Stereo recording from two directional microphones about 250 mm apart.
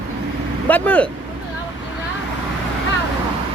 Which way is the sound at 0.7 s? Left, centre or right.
Centre.